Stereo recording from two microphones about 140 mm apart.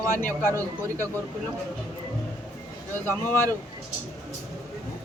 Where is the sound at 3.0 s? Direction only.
15° left (ahead or behind).